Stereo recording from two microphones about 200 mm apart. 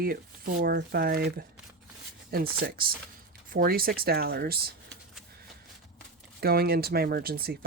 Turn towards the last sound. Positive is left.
turn(degrees=-50)  # may be behind; listen again after turning